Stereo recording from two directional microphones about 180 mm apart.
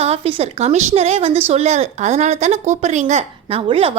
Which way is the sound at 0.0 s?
35° right (ahead or behind).